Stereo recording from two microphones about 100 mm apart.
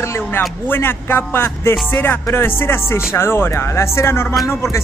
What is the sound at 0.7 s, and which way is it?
Music, 20° left (ahead or behind).